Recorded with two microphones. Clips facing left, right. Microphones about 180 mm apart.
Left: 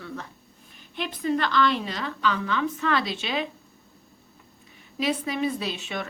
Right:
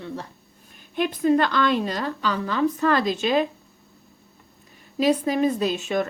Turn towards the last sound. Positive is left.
turn(degrees=-45)  # may be behind; listen again after turning